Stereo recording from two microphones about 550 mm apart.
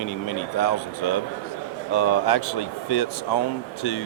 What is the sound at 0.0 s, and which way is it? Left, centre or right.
Speech, left.